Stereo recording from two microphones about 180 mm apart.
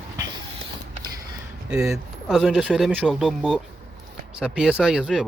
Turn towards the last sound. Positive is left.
turn(degrees=-5)  # may be behind; listen again after turning